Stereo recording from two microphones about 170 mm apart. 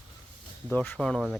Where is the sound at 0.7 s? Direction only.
10° left (ahead or behind).